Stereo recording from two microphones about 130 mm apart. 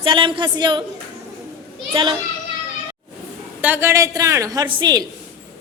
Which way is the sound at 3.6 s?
15° right (ahead or behind).